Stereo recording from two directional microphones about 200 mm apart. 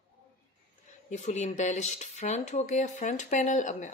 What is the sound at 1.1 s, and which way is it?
A woman's voice, 35° left (ahead or behind).